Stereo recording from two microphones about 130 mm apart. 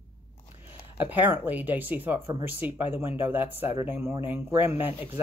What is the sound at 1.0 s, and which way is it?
Speech, 15° right (ahead or behind).